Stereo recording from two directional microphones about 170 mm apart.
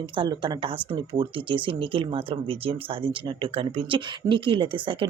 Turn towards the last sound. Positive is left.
turn(degrees=-30)  # may be behind; listen again after turning